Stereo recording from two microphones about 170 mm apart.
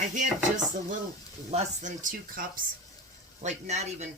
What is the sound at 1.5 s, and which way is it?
Speech, 40° right (ahead or behind).